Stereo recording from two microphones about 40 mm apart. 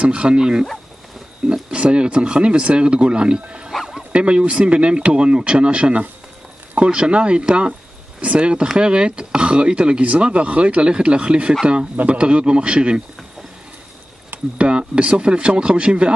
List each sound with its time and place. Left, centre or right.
0.0 s speech: right
14.6 s speech: right